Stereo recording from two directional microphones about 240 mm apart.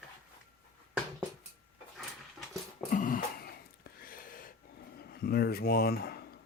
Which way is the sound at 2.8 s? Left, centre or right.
Left.